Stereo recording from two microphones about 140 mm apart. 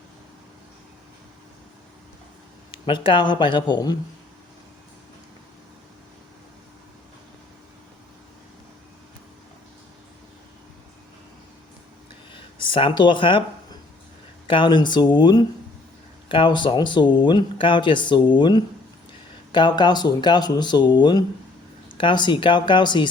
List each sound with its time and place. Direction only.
2.7 s speech: 35° left (ahead or behind)
12.3 s a sound: 35° left (ahead or behind)
14.4 s speech: 35° left (ahead or behind)